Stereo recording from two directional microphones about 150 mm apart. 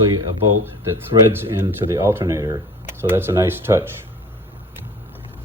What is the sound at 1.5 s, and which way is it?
Speech, 15° right (ahead or behind).